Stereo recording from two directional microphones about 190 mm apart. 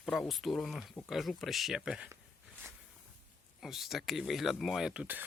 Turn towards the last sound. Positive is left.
turn(degrees=-5)  # may be behind; listen again after turning